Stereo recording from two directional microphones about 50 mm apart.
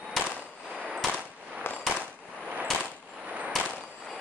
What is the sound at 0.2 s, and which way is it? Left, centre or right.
Machine gun, centre.